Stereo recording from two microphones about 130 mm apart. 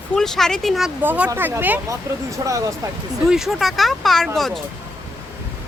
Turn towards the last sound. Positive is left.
turn(degrees=5)  # may be behind; listen again after turning